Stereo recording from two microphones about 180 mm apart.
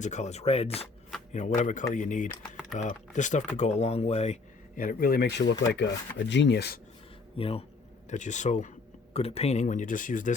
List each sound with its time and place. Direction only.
0.0 s speech: 40° left (ahead or behind)
4.8 s speech: 50° left (ahead or behind); by 6.7 s 65° left (ahead or behind)
7.3 s speech: 30° left (ahead or behind)
8.1 s speech: 40° left (ahead or behind)